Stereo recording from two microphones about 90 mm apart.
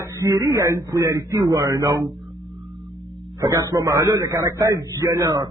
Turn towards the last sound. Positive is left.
turn(degrees=-35)  # may be behind; listen again after turning